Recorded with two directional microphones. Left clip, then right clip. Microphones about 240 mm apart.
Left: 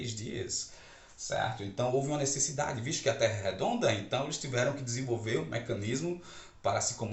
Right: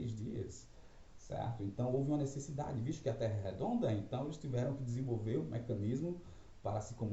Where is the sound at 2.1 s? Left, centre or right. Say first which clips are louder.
Left 8 dB; centre.